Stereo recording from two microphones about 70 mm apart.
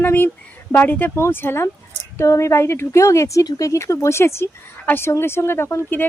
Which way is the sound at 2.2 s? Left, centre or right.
Left.